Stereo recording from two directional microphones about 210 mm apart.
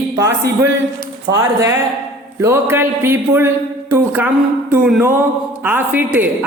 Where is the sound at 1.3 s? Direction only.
15° right (ahead or behind).